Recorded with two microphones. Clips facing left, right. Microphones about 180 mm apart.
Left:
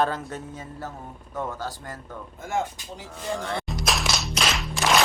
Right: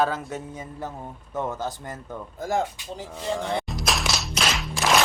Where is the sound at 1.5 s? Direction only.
20° right (ahead or behind).